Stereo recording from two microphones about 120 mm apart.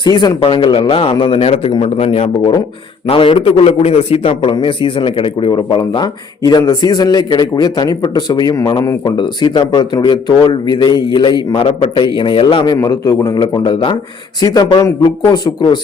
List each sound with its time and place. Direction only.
0.0 s a man's voice: 35° left (ahead or behind)
9.0 s a man's voice: 40° left (ahead or behind)
12.7 s a man's voice: 30° left (ahead or behind)